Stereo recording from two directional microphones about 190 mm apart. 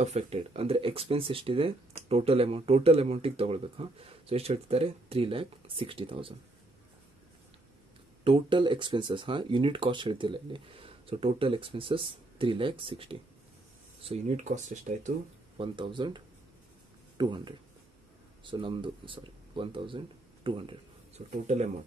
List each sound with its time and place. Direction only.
0.0 s speech: 35° right (ahead or behind)
8.2 s speech: 25° right (ahead or behind)
17.2 s speech: 25° right (ahead or behind)
21.3 s speech: 40° right (ahead or behind)